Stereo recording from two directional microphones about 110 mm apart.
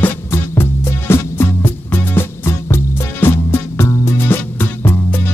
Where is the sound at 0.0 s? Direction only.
20° left (ahead or behind).